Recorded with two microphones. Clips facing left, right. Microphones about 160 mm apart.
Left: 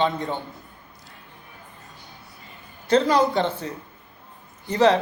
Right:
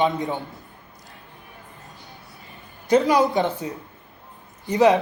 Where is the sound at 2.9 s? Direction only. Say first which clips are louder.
Right 1 dB; 15° right (ahead or behind).